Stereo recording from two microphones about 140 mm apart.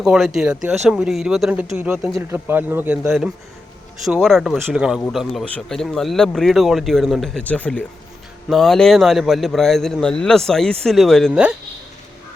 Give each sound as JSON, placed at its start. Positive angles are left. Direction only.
{"t": 0.0, "sound": "a man's voice", "side_deg": -5}
{"t": 4.0, "sound": "a man's voice", "side_deg": 0}